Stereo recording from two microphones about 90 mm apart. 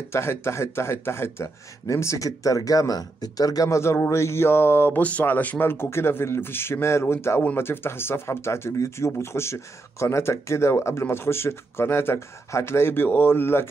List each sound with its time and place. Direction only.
0.1 s speech: 30° left (ahead or behind)